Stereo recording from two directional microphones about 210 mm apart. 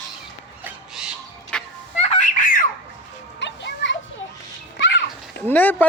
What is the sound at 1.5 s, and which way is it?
Fowl, 5° left (ahead or behind).